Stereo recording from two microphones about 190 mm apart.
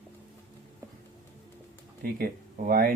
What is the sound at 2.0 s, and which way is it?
Speech, 50° right (ahead or behind).